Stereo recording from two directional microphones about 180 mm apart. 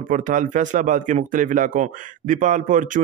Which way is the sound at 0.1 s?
45° right (ahead or behind).